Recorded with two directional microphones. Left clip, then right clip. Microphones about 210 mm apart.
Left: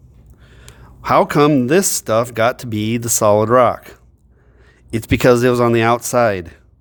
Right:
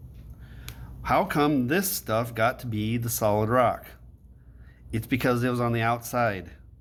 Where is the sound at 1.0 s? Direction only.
50° left (ahead or behind).